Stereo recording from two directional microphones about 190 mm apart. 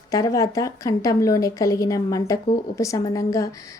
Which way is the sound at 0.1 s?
15° left (ahead or behind).